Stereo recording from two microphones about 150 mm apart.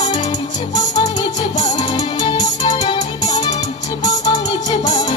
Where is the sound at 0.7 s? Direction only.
25° left (ahead or behind).